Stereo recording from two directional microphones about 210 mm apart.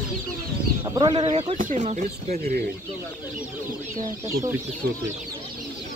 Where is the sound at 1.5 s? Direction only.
35° right (ahead or behind).